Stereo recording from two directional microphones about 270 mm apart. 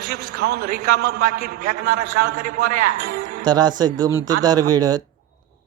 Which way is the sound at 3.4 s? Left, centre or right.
Centre.